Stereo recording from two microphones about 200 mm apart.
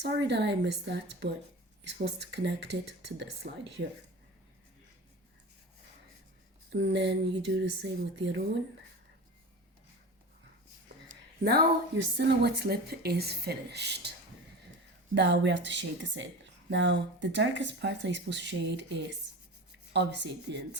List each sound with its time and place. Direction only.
0.0 s a woman's voice: 60° right (ahead or behind)
6.7 s a woman's voice: 60° right (ahead or behind)
11.4 s speech: 55° right (ahead or behind)
15.1 s a woman's voice: 60° right (ahead or behind)